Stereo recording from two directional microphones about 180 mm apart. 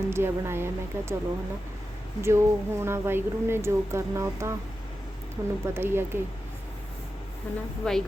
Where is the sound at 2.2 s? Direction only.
15° right (ahead or behind).